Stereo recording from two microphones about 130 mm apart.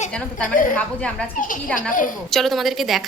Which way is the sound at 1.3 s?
90° left.